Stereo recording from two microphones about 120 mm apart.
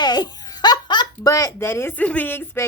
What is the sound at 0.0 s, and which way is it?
A child's voice, 35° left (ahead or behind).